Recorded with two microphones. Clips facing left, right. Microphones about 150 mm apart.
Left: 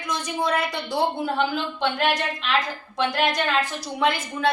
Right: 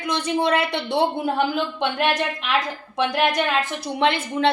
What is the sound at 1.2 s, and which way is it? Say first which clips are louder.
Speech: right 2 dB; 15° right (ahead or behind).